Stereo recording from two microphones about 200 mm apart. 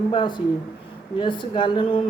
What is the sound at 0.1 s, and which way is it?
Speech, 25° left (ahead or behind).